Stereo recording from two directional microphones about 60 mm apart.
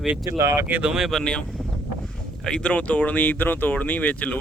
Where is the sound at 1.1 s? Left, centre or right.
Centre.